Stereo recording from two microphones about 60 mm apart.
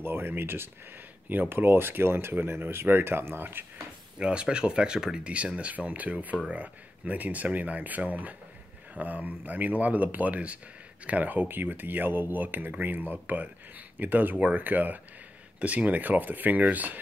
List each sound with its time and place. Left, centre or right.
0.0 s speech: right
4.2 s speech: centre